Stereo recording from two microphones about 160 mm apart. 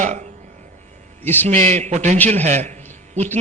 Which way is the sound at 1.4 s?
45° right (ahead or behind).